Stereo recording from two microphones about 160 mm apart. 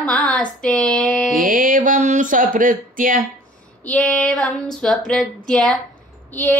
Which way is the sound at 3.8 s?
10° left (ahead or behind).